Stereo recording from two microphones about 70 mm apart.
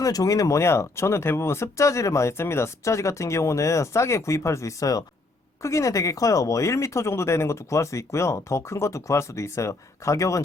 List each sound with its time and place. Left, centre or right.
0.0 s speech: left